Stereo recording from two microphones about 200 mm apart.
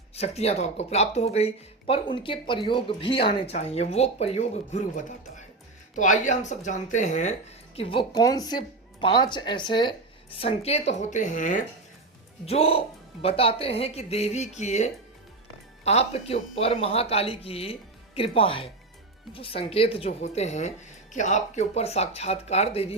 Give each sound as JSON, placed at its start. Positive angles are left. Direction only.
{"t": 0.1, "sound": "speech", "side_deg": 30}
{"t": 7.8, "sound": "speech", "side_deg": 25}
{"t": 12.5, "sound": "speech", "side_deg": 30}